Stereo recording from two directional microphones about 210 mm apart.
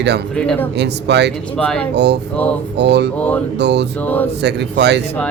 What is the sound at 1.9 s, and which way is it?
Speech, 55° right (ahead or behind).